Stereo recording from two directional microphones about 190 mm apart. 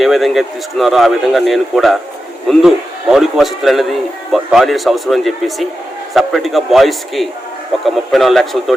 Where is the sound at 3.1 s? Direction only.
Centre (ahead or behind).